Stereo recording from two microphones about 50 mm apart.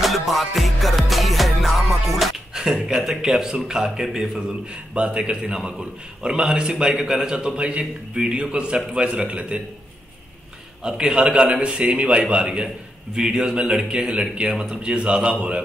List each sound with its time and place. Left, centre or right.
0.0 s music: centre
2.5 s a man's voice: centre
4.9 s a man's voice: right
10.8 s a man's voice: centre
13.1 s a man's voice: centre